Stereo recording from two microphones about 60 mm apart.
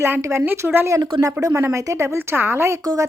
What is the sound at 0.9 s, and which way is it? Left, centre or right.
A woman's voice, right.